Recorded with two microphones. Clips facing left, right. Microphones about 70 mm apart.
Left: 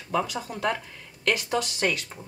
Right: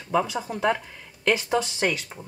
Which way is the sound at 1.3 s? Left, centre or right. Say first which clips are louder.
Right 3 dB; right.